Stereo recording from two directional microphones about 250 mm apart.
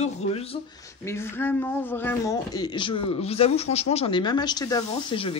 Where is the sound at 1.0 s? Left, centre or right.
Centre.